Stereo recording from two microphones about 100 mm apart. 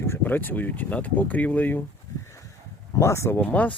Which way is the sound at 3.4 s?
15° left (ahead or behind).